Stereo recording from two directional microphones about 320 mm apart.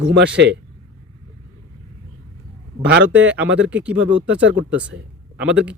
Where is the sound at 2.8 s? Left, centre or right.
Right.